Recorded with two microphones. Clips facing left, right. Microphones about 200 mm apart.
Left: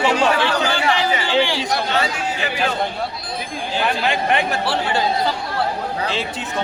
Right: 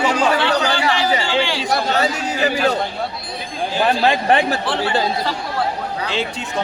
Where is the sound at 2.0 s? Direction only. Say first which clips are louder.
Right 3 dB; 40° right (ahead or behind).